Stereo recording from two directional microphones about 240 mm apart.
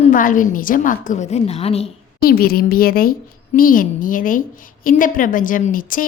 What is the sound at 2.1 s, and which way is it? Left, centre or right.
A woman's voice, left.